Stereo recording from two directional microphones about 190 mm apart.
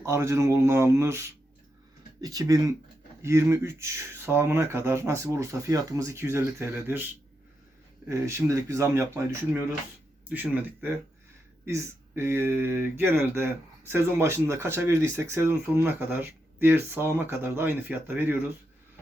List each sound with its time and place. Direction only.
0.0 s speech: 15° right (ahead or behind)
8.0 s speech: 15° right (ahead or behind)